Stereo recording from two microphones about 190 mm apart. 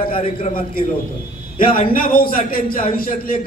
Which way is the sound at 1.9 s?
50° left (ahead or behind).